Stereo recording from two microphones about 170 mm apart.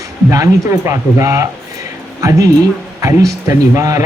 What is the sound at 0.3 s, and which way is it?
Speech, 20° right (ahead or behind).